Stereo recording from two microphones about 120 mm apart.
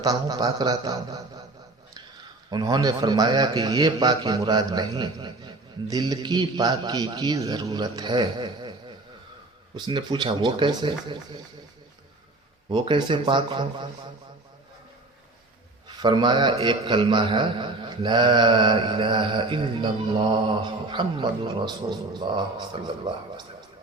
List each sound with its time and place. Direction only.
0.0 s a man's voice: 30° right (ahead or behind)
2.5 s a man's voice: 35° right (ahead or behind)
9.7 s a man's voice: 40° right (ahead or behind)
12.7 s a man's voice: 40° right (ahead or behind)
16.0 s a man's voice: 40° right (ahead or behind)